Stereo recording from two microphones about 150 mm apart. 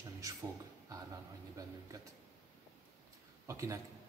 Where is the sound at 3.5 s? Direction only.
20° right (ahead or behind).